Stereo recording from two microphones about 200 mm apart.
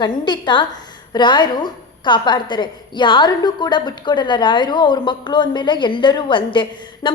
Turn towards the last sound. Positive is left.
turn(degrees=25)  # may be behind; listen again after turning